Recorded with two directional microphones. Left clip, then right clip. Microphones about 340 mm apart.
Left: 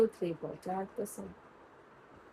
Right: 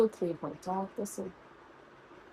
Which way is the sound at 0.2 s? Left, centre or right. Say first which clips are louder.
Right 2 dB; right.